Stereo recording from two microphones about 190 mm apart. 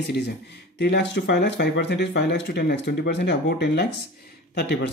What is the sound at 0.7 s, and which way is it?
Speech, 60° left (ahead or behind).